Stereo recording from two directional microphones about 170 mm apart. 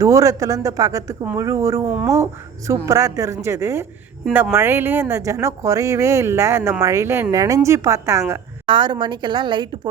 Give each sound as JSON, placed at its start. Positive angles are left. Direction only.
{"t": 0.0, "sound": "a woman's voice", "side_deg": -20}
{"t": 8.6, "sound": "speech", "side_deg": -30}